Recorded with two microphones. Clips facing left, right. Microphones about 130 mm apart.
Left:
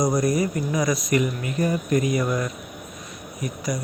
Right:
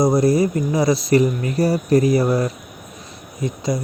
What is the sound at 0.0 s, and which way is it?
Speech, 25° right (ahead or behind).